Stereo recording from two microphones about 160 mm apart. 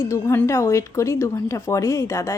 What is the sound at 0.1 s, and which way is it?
Speech, 20° left (ahead or behind).